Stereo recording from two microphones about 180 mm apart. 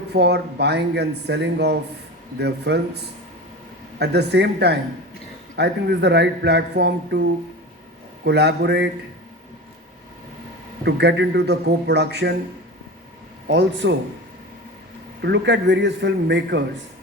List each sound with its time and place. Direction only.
0.1 s speech: 65° right (ahead or behind)
10.8 s speech: 70° right (ahead or behind)
13.5 s speech: 75° right (ahead or behind)
15.2 s speech: 75° right (ahead or behind)